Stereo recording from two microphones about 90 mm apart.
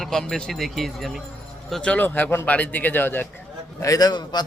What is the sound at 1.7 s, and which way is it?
Speech, 10° left (ahead or behind).